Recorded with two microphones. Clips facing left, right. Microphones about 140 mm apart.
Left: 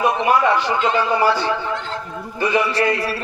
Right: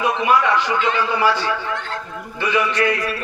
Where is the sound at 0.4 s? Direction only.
25° left (ahead or behind).